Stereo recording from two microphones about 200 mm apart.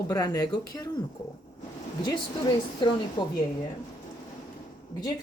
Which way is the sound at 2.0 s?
20° left (ahead or behind).